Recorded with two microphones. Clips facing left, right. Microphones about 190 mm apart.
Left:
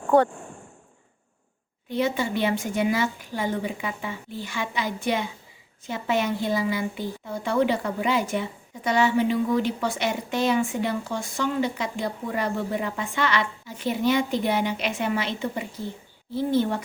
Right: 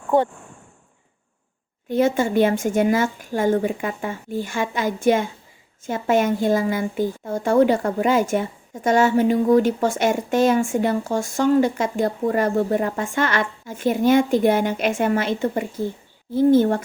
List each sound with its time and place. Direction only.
1.9 s a woman's voice: 45° right (ahead or behind)